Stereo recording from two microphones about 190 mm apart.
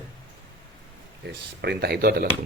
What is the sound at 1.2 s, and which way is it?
Speech, 60° right (ahead or behind).